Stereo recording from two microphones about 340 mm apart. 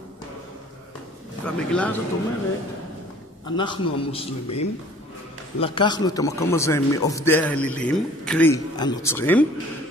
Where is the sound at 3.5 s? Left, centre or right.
Centre.